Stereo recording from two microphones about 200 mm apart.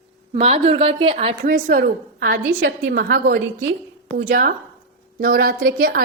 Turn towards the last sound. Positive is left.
turn(degrees=-50)  # may be behind; listen again after turning